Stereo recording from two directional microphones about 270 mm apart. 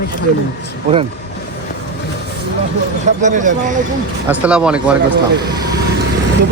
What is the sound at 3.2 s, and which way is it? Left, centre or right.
Speech, right.